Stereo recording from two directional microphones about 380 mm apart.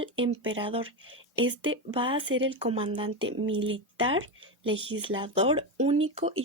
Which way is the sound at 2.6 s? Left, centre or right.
Centre.